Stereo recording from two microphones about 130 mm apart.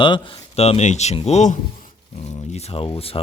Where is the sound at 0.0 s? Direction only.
40° left (ahead or behind).